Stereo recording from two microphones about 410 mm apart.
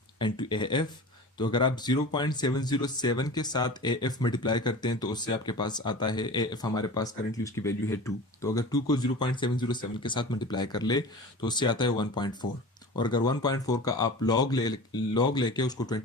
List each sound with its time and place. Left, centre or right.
0.2 s speech: centre